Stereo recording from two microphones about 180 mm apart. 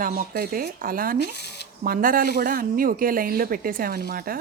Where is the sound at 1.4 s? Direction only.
65° left (ahead or behind).